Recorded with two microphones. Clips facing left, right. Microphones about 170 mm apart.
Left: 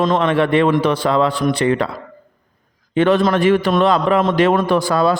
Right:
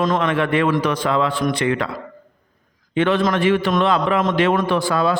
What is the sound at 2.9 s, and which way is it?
A man's voice, 40° left (ahead or behind).